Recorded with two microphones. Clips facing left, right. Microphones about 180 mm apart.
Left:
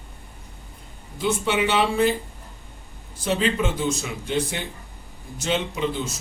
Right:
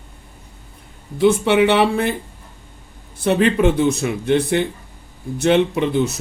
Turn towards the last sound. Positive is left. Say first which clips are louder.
# right 8 dB
turn(degrees=-65)  # may be behind; listen again after turning